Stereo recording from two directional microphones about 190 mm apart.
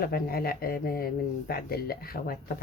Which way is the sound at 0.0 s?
50° left (ahead or behind).